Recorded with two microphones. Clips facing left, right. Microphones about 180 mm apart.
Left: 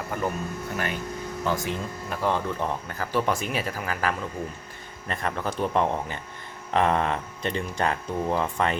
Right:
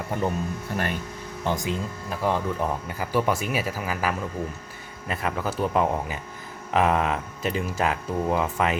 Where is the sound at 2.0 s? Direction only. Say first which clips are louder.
Right 1 dB; 5° right (ahead or behind).